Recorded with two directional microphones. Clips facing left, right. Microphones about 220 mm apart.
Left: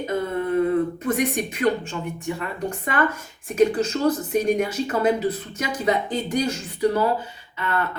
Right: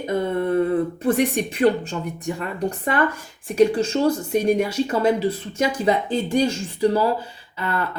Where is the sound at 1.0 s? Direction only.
35° right (ahead or behind).